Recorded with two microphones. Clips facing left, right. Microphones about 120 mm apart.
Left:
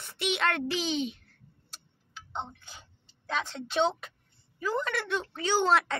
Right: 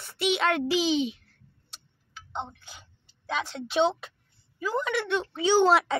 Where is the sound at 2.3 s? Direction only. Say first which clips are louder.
Right 2 dB; 15° right (ahead or behind).